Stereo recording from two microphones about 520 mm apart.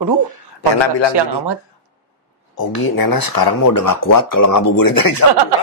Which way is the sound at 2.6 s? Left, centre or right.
Left.